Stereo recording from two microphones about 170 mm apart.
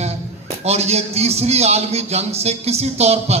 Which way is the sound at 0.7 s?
40° right (ahead or behind).